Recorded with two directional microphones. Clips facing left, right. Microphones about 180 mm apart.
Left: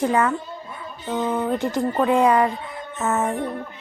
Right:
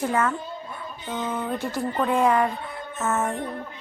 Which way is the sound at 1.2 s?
35° left (ahead or behind).